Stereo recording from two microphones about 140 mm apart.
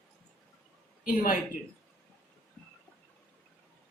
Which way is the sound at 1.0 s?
80° left.